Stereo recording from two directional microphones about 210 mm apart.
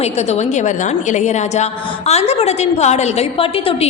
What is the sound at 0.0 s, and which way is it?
A woman's voice, 30° left (ahead or behind).